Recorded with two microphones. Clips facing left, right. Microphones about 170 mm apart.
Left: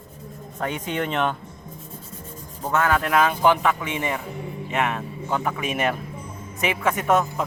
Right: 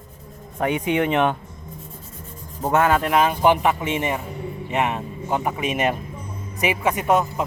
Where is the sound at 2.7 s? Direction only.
25° right (ahead or behind).